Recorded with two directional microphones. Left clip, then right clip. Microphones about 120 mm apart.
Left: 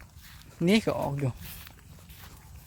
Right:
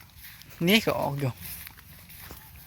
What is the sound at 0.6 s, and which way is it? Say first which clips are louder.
Speech: right 3 dB; 15° left (ahead or behind).